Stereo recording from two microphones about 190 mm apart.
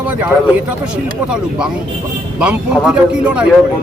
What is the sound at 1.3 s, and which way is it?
Speech, 5° right (ahead or behind).